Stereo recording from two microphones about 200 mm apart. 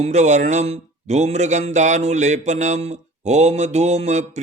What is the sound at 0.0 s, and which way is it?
Speech, 35° right (ahead or behind).